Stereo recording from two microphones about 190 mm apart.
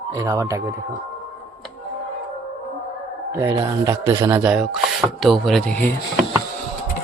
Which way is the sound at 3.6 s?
15° right (ahead or behind).